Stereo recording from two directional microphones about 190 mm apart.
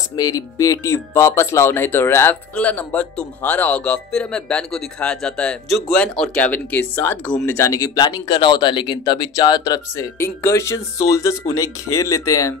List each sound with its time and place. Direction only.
0.1 s speech: 20° left (ahead or behind)